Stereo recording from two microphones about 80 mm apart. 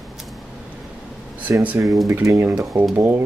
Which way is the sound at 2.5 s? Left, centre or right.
Right.